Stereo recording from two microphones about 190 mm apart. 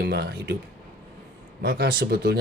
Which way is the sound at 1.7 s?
60° right (ahead or behind).